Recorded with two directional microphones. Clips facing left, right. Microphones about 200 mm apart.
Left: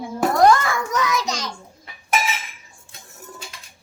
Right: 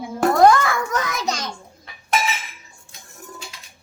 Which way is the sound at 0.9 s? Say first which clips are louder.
Left 1 dB; 55° right (ahead or behind).